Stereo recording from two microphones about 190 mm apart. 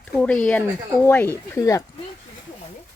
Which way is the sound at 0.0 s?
5° left (ahead or behind).